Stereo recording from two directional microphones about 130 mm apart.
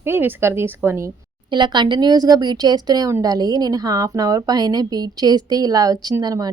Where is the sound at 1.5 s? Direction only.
35° right (ahead or behind).